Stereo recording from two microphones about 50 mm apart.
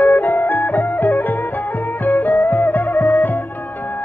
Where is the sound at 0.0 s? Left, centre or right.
Left.